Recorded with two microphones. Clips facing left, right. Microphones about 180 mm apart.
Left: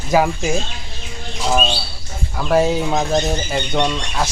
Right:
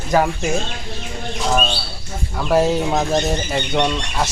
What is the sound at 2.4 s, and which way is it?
Speech, centre (ahead or behind).